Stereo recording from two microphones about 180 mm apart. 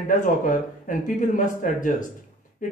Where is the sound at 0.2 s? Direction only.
45° left (ahead or behind).